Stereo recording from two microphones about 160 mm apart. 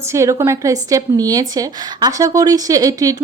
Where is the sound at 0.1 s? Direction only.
20° right (ahead or behind).